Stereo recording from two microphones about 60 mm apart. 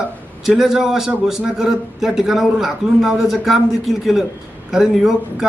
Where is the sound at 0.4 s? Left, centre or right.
Centre.